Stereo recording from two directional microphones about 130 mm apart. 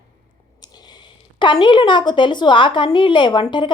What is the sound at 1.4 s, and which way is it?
Speech, 35° left (ahead or behind).